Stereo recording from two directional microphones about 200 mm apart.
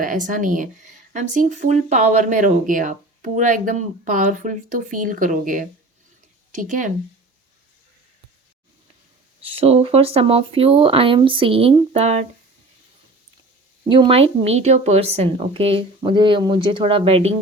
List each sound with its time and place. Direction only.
0.0 s speech: 40° right (ahead or behind)
9.4 s speech: 30° right (ahead or behind)
13.9 s speech: 25° right (ahead or behind)